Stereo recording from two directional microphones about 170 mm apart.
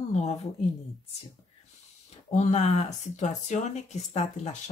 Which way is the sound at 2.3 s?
40° left (ahead or behind).